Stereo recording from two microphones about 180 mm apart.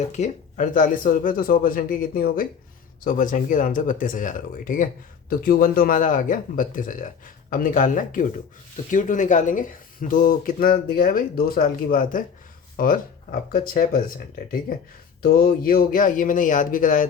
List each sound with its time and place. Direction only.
0.1 s speech: 45° left (ahead or behind)
15.2 s speech: 55° left (ahead or behind)